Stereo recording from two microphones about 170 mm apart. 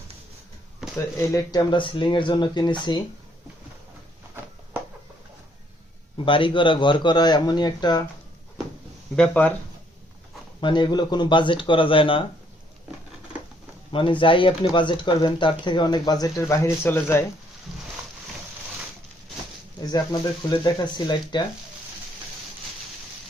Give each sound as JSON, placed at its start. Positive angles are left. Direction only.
{"t": 0.9, "sound": "speech", "side_deg": 15}
{"t": 6.2, "sound": "speech", "side_deg": 30}
{"t": 9.1, "sound": "speech", "side_deg": 10}
{"t": 10.6, "sound": "speech", "side_deg": 25}
{"t": 13.9, "sound": "speech", "side_deg": 30}
{"t": 19.8, "sound": "speech", "side_deg": 20}